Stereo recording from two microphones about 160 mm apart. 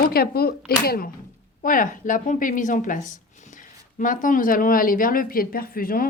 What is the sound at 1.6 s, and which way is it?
Speech, 60° left (ahead or behind).